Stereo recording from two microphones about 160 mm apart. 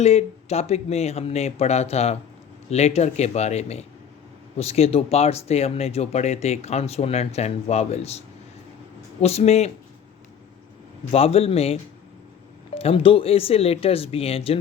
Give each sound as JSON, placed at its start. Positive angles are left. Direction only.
{"t": 0.0, "sound": "speech", "side_deg": 40}
{"t": 9.2, "sound": "speech", "side_deg": 40}
{"t": 11.1, "sound": "speech", "side_deg": 40}